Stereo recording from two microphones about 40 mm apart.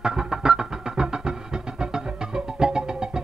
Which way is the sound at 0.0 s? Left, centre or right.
Centre.